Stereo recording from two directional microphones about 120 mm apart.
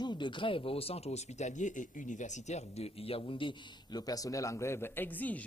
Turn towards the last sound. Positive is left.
turn(degrees=15)  # may be behind; listen again after turning